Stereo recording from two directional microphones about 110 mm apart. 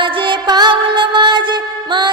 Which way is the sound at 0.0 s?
50° right (ahead or behind).